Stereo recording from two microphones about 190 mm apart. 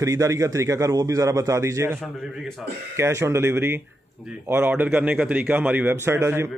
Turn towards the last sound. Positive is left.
turn(degrees=-15)  # may be behind; listen again after turning